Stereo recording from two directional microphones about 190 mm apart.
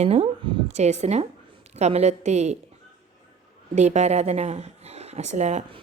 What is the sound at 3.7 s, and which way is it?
Speech, 35° right (ahead or behind).